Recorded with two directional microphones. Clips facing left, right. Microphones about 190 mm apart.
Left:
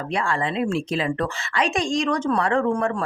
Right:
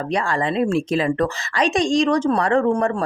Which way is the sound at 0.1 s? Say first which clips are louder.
Right 3 dB; 40° right (ahead or behind).